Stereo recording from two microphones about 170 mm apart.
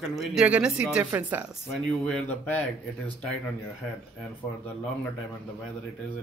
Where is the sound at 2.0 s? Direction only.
5° left (ahead or behind).